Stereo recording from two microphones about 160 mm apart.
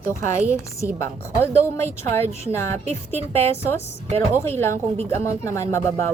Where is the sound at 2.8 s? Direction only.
40° right (ahead or behind).